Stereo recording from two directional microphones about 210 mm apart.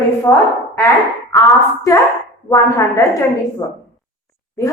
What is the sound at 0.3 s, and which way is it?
Speech, 15° left (ahead or behind).